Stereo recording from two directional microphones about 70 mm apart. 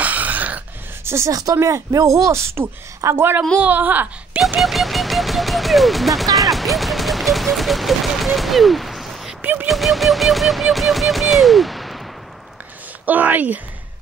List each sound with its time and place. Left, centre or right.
0.0 s throat clearing: right
1.0 s speech: right
1.3 s a woman's voice: right
3.5 s speech: right
4.6 s music: centre
6.3 s fusillade: centre
9.4 s a sound: right
9.7 s music: centre
13.0 s speech: right